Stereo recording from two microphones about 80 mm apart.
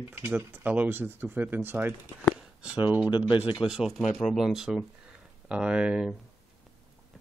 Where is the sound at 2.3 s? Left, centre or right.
Centre.